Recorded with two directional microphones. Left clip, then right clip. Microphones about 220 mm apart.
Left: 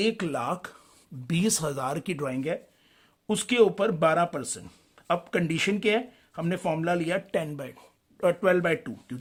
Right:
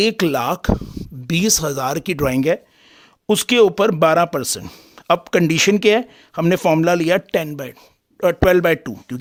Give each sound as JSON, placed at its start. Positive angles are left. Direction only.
{"t": 0.0, "sound": "speech", "side_deg": -50}
{"t": 2.2, "sound": "speech", "side_deg": -50}
{"t": 8.4, "sound": "speech", "side_deg": -55}